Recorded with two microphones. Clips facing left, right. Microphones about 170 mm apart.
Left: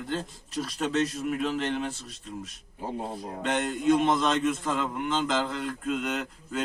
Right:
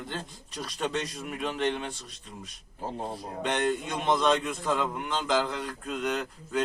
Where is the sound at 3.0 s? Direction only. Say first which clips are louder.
Right 1 dB; centre (ahead or behind).